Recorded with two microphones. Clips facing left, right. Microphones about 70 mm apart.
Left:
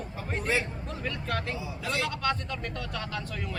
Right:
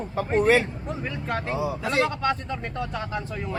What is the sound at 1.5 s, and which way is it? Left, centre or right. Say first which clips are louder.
Speech: right 10 dB; right.